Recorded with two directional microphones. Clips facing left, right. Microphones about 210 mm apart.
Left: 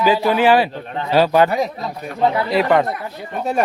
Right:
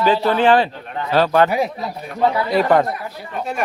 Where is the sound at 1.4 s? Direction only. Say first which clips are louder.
Even; 10° right (ahead or behind).